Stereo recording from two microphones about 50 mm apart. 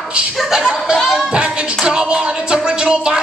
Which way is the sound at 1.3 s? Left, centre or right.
Centre.